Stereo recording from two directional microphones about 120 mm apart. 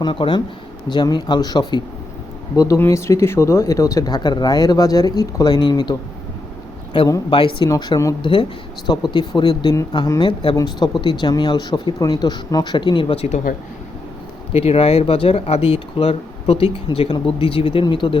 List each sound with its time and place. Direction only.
0.0 s speech: 45° left (ahead or behind)
2.6 s speech: 25° left (ahead or behind)
7.3 s speech: 45° left (ahead or behind)
7.6 s speech: 35° left (ahead or behind)
8.2 s speech: 45° left (ahead or behind)
14.5 s speech: 55° left (ahead or behind)